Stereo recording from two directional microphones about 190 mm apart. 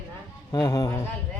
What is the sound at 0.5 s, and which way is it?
Speech, 15° left (ahead or behind).